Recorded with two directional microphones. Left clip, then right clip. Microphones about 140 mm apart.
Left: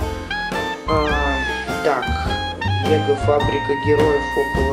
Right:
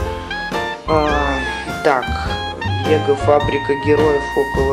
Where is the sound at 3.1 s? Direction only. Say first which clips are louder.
Right 6 dB; 10° right (ahead or behind).